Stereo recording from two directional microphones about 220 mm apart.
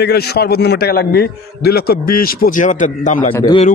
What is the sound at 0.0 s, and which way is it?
A man's voice, 45° left (ahead or behind).